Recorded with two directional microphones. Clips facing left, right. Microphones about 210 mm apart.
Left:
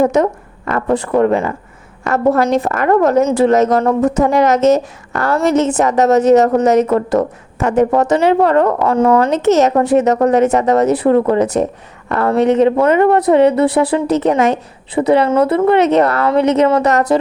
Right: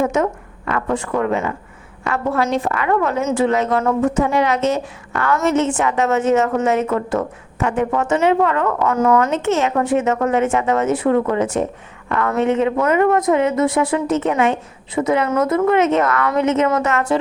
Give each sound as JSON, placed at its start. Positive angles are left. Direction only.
{"t": 0.0, "sound": "a woman's voice", "side_deg": 35}